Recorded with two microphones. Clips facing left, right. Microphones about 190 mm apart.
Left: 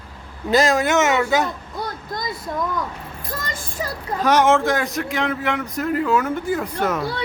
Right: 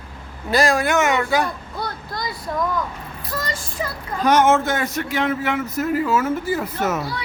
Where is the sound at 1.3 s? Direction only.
20° left (ahead or behind).